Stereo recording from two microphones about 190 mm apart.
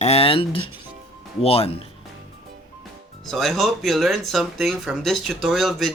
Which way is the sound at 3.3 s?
Centre (ahead or behind).